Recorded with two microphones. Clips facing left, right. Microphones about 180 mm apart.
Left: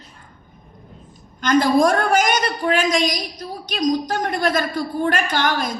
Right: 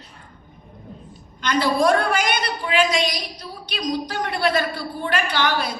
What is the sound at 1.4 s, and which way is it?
A woman's voice, 45° left (ahead or behind).